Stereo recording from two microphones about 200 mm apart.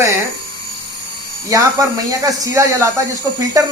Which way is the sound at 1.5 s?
15° right (ahead or behind).